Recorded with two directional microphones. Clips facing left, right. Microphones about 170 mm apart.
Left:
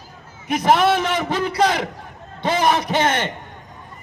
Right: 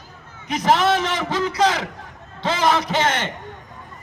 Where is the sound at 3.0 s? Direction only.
55° left (ahead or behind).